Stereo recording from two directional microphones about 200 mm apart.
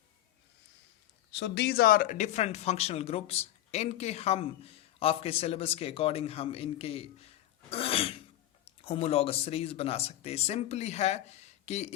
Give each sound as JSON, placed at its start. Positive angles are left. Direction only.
{"t": 1.3, "sound": "speech", "side_deg": 60}
{"t": 7.7, "sound": "throat clearing", "side_deg": 30}
{"t": 8.6, "sound": "speech", "side_deg": 30}